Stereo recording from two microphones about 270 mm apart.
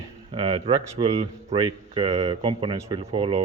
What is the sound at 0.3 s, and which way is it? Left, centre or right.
Speech, centre.